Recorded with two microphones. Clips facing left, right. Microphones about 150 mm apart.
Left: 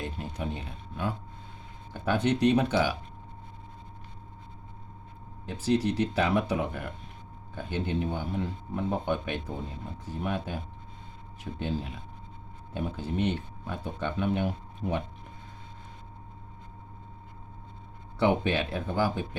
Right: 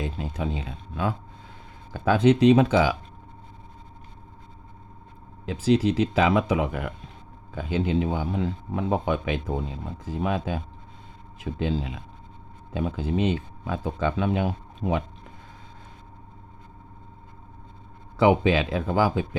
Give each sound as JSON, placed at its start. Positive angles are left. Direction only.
{"t": 1.9, "sound": "speech", "side_deg": -90}
{"t": 5.5, "sound": "speech", "side_deg": -90}
{"t": 18.4, "sound": "speech", "side_deg": -90}